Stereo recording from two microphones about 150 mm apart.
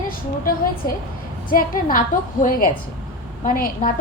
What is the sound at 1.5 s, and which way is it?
A woman's voice, 70° left (ahead or behind).